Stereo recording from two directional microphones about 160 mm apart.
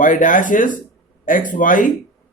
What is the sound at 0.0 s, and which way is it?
A man's voice, 55° left (ahead or behind).